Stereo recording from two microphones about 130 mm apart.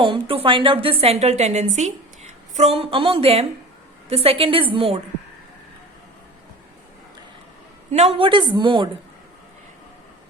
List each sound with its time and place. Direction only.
0.0 s a woman's voice: 45° right (ahead or behind)
7.9 s a woman's voice: 60° right (ahead or behind)
8.2 s a woman's voice: 40° right (ahead or behind)